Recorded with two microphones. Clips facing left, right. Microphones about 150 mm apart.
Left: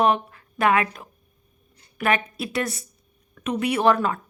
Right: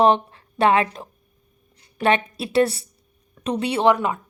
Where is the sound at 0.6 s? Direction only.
30° right (ahead or behind).